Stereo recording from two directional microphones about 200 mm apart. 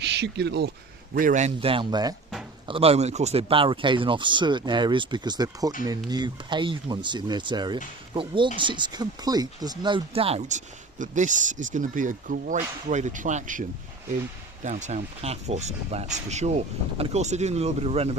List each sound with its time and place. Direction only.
0.0 s speech: 60° right (ahead or behind)
1.1 s speech: 40° right (ahead or behind)